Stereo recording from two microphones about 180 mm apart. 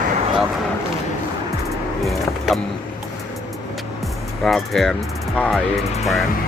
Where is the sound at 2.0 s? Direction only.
Centre (ahead or behind).